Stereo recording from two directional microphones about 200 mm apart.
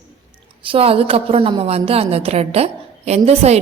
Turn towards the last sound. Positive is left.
turn(degrees=-30)  # may be behind; listen again after turning